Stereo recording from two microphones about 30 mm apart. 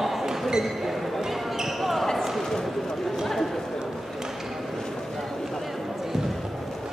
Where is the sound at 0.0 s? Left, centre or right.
Centre.